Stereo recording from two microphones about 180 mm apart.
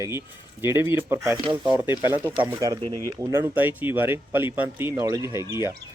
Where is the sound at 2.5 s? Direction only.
20° right (ahead or behind).